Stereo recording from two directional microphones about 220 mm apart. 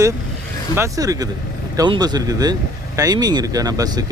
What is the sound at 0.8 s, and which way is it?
Speech, 15° right (ahead or behind).